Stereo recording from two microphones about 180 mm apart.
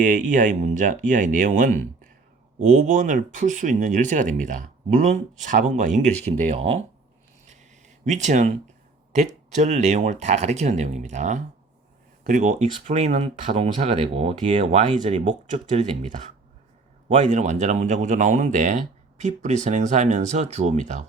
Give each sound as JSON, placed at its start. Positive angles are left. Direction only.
{"t": 0.0, "sound": "speech", "side_deg": -45}
{"t": 8.0, "sound": "speech", "side_deg": -40}